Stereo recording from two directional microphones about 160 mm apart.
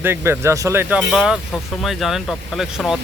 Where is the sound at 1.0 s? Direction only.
5° right (ahead or behind).